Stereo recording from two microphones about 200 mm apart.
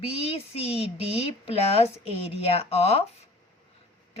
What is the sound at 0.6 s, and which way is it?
A woman's voice, 30° left (ahead or behind).